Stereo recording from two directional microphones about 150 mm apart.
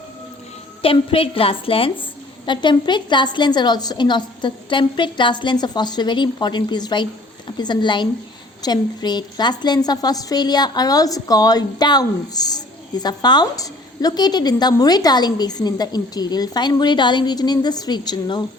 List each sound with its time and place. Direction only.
0.8 s a woman's voice: 40° left (ahead or behind)